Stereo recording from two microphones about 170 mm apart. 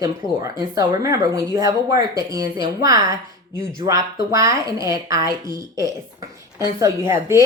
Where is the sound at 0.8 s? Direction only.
20° right (ahead or behind).